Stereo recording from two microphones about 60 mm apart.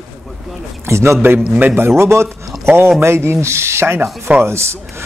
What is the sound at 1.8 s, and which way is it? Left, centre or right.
A man's voice, right.